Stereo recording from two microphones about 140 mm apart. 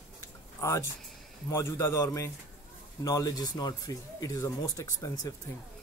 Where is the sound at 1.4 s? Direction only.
20° left (ahead or behind).